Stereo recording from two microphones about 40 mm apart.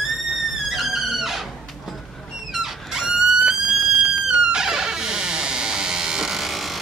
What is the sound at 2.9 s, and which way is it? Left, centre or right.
Music, centre.